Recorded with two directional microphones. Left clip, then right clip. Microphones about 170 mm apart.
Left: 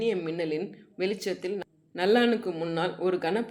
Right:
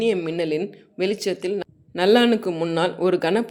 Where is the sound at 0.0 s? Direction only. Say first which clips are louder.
Right 6 dB; 40° right (ahead or behind).